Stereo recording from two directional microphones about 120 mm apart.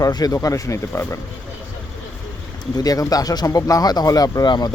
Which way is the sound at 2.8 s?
30° left (ahead or behind).